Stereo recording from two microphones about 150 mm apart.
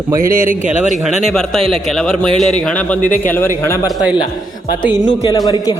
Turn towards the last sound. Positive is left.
turn(degrees=25)  # may be behind; listen again after turning